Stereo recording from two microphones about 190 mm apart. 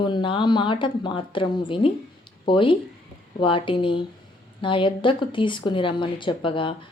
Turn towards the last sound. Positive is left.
turn(degrees=25)  # may be behind; listen again after turning